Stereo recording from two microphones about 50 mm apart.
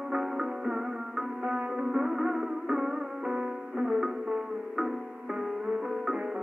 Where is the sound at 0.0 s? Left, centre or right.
Centre.